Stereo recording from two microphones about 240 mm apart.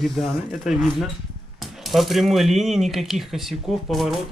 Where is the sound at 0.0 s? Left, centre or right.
Centre.